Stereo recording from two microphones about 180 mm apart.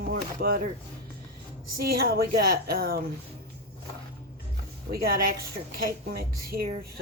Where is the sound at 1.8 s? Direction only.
55° right (ahead or behind).